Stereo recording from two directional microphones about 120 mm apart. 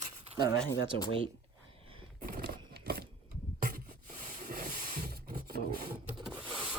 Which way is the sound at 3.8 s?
75° right (ahead or behind).